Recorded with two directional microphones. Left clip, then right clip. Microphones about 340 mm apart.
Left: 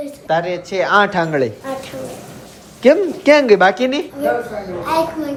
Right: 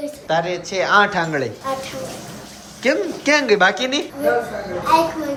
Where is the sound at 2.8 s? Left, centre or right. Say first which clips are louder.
Left 7 dB; centre.